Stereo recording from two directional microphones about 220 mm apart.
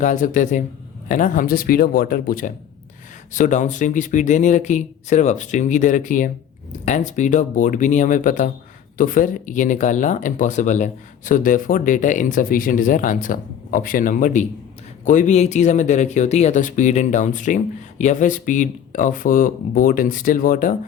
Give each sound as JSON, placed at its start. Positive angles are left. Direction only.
{"t": 0.0, "sound": "speech", "side_deg": 35}